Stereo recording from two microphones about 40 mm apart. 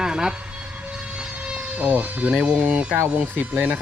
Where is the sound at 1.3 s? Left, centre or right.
Right.